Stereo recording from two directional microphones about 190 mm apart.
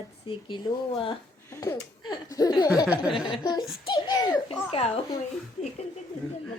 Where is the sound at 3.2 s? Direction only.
25° left (ahead or behind).